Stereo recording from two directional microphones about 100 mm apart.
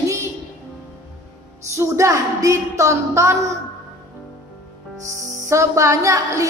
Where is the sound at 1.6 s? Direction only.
30° right (ahead or behind).